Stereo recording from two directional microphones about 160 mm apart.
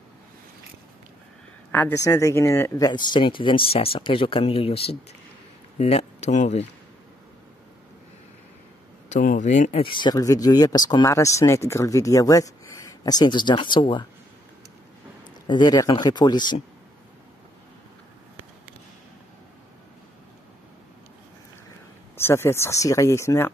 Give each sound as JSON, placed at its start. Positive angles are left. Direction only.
{"t": 1.7, "sound": "speech", "side_deg": 10}
{"t": 2.9, "sound": "speech", "side_deg": 30}
{"t": 9.1, "sound": "speech", "side_deg": 55}
{"t": 15.4, "sound": "speech", "side_deg": 25}
{"t": 22.1, "sound": "speech", "side_deg": 15}